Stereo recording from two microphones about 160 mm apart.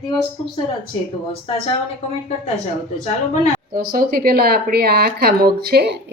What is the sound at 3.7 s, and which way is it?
Speech, 65° right (ahead or behind).